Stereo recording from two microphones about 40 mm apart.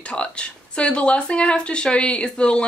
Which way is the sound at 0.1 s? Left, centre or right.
Left.